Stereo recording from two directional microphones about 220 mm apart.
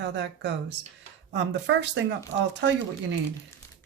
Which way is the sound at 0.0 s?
50° right (ahead or behind).